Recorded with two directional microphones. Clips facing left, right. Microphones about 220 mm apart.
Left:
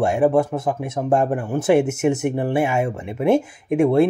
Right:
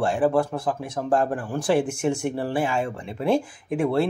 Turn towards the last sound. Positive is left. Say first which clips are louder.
# left 6 dB
turn(degrees=20)  # may be behind; listen again after turning